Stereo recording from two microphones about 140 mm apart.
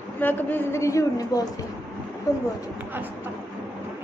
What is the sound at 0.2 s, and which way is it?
A woman's voice, 15° left (ahead or behind).